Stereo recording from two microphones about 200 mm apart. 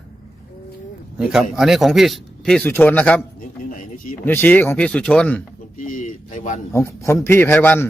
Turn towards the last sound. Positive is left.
turn(degrees=10)  # may be behind; listen again after turning